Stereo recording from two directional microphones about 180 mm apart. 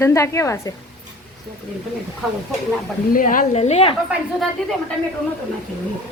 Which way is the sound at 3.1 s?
50° left (ahead or behind).